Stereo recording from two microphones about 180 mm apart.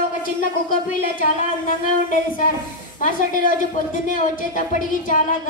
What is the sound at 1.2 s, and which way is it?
Speech, 50° left (ahead or behind).